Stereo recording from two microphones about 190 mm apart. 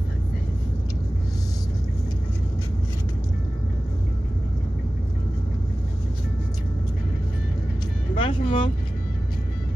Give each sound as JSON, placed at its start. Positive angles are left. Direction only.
{"t": 8.2, "sound": "music", "side_deg": 25}